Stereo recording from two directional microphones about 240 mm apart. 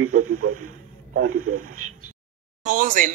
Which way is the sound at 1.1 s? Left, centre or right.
Right.